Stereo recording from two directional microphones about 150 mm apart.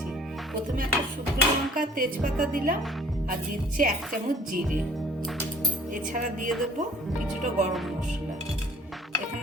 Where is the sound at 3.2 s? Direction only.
65° right (ahead or behind).